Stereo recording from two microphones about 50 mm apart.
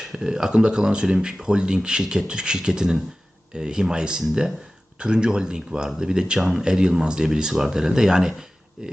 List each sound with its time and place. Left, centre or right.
0.0 s speech: centre